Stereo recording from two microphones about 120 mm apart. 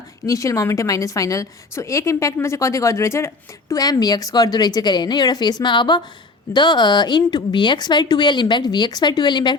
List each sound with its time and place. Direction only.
0.3 s a woman's voice: 25° left (ahead or behind)